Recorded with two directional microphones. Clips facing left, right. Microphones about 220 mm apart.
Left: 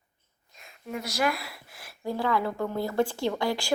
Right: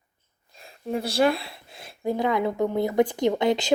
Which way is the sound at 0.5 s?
30° right (ahead or behind).